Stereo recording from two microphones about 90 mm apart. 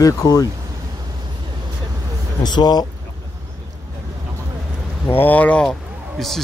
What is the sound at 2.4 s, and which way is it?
Speech, 50° left (ahead or behind).